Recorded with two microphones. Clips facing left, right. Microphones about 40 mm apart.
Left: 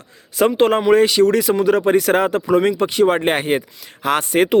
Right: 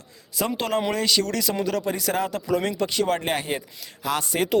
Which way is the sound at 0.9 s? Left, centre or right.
Left.